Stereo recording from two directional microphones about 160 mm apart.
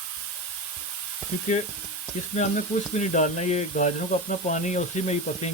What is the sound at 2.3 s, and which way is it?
Speech, 45° left (ahead or behind).